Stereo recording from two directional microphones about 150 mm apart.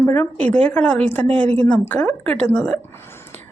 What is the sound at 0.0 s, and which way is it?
Speech, 15° left (ahead or behind).